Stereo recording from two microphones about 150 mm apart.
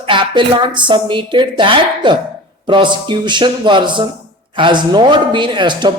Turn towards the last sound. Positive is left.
turn(degrees=-30)  # may be behind; listen again after turning